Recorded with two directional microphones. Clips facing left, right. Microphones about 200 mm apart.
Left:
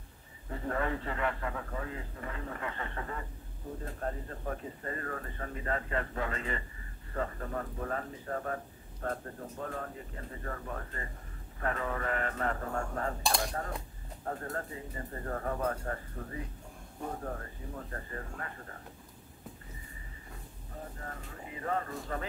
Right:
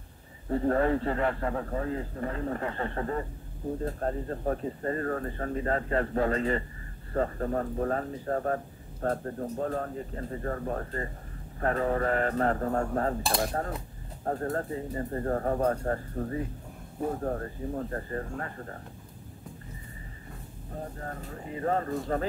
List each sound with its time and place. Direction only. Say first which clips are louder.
0.5 s speech: right 9 dB; 40° right (ahead or behind)
13.3 s cutlery: right 5 dB; centre (ahead or behind)
14.2 s speech: right 7 dB; 40° right (ahead or behind)
21.0 s speech: right 6 dB; 40° right (ahead or behind)